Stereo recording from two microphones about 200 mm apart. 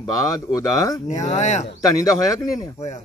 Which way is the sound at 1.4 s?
35° left (ahead or behind).